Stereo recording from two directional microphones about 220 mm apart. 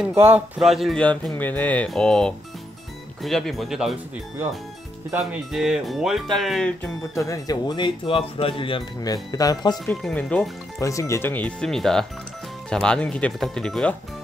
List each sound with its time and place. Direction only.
0.3 s speech: centre (ahead or behind)
5.1 s speech: 5° right (ahead or behind)
7.2 s speech: 15° left (ahead or behind)
10.0 s speech: 5° left (ahead or behind)